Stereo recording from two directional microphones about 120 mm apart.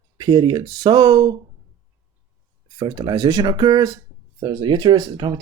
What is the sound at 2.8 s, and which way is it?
Speech, 35° right (ahead or behind).